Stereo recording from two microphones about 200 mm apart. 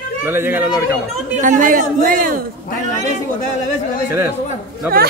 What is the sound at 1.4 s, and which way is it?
Speech, 40° right (ahead or behind).